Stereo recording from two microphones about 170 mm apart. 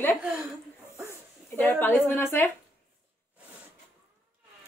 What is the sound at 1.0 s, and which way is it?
Snake, 15° left (ahead or behind).